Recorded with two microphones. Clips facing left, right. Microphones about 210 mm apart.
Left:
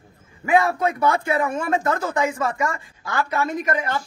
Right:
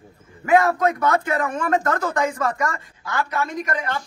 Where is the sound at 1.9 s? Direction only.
25° left (ahead or behind).